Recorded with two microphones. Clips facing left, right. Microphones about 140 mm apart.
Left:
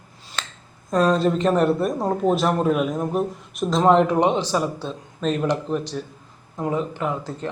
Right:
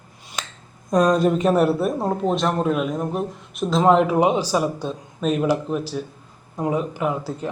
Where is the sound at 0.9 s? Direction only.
15° right (ahead or behind).